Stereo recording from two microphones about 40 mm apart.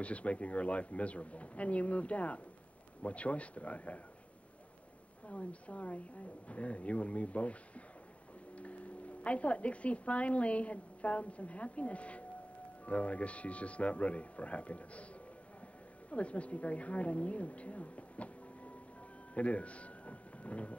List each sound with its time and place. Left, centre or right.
0.0 s speech: left
5.2 s speech: left
16.1 s speech: left
19.3 s a sound: left